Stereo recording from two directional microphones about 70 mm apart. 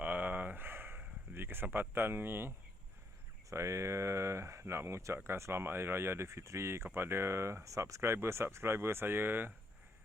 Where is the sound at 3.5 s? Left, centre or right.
Right.